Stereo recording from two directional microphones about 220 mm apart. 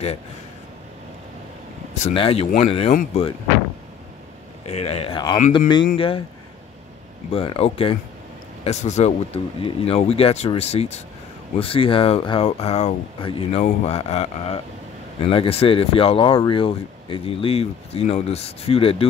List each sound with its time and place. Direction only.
2.0 s speech: 30° left (ahead or behind)
4.6 s speech: 30° left (ahead or behind)
7.2 s speech: 25° left (ahead or behind)